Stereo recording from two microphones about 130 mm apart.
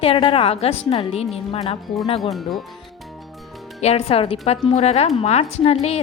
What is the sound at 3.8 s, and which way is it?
A woman's voice, 50° left (ahead or behind).